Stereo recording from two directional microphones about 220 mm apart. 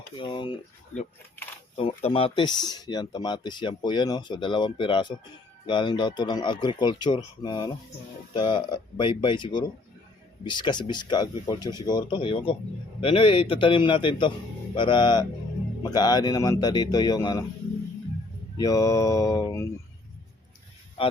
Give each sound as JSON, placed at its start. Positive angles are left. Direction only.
{"t": 0.2, "sound": "speech", "side_deg": 20}
{"t": 2.0, "sound": "speech", "side_deg": 25}
{"t": 18.5, "sound": "speech", "side_deg": 15}